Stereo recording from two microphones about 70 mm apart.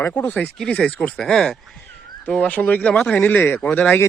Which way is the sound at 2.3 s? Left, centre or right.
Left.